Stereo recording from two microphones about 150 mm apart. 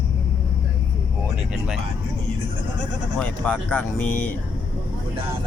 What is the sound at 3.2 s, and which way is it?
Speech, 10° left (ahead or behind).